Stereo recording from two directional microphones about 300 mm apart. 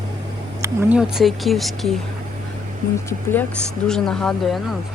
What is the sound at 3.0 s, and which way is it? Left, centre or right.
Speech, centre.